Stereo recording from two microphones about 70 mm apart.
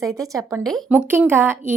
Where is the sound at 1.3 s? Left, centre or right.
Right.